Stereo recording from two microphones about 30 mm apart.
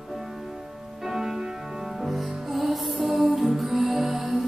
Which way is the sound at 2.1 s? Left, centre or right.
Centre.